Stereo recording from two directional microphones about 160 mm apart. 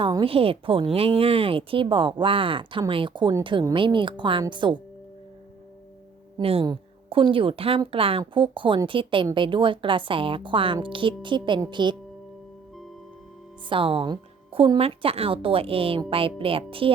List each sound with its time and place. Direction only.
0.0 s a woman's voice: 30° right (ahead or behind)
6.4 s a woman's voice: 35° right (ahead or behind)
13.7 s a woman's voice: 35° right (ahead or behind)